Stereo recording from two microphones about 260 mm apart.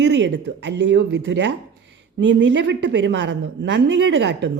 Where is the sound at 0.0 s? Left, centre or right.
Right.